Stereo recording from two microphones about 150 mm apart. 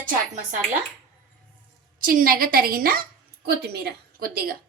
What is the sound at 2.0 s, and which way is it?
A woman's voice, 75° right (ahead or behind).